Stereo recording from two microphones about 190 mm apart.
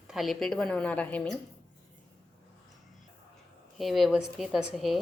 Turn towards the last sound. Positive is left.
turn(degrees=0)  # may be behind; listen again after turning